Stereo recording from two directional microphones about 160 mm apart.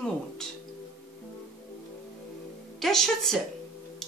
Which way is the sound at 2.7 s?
Centre (ahead or behind).